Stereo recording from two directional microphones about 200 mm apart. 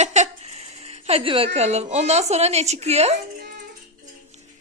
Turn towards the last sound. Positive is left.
turn(degrees=-35)  # may be behind; listen again after turning